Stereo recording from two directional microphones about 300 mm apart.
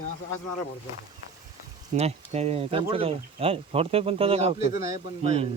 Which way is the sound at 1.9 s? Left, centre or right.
Right.